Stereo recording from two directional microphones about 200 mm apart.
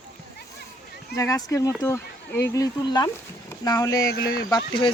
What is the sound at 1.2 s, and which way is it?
Speech, 15° left (ahead or behind).